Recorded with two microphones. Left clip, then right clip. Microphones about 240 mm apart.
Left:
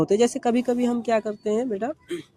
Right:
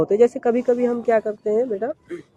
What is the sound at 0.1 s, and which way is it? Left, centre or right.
Speech, left.